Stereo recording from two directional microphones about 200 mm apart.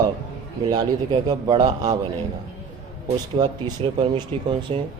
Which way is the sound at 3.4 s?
25° right (ahead or behind).